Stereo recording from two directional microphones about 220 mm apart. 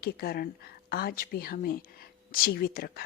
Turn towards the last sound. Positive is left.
turn(degrees=45)  # may be behind; listen again after turning